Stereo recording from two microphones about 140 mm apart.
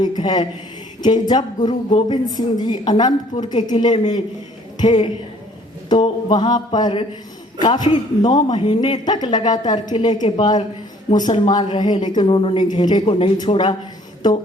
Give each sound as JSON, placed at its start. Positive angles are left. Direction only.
{"t": 0.0, "sound": "a woman's voice", "side_deg": 30}